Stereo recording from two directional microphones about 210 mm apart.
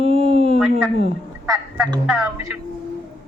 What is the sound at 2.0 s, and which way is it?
Speech, 5° right (ahead or behind).